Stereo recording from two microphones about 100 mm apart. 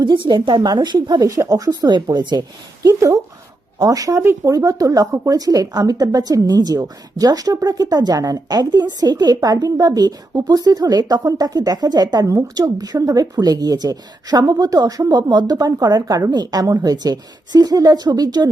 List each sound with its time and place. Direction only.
0.0 s speech: 50° right (ahead or behind)
2.8 s speech: 35° right (ahead or behind)
12.6 s speech: 45° right (ahead or behind)